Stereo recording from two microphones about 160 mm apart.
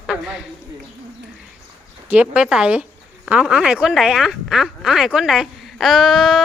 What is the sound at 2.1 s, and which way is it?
A woman's voice, 10° right (ahead or behind).